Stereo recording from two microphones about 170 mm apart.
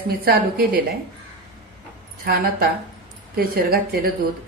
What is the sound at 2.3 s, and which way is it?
A woman's voice, 60° right (ahead or behind).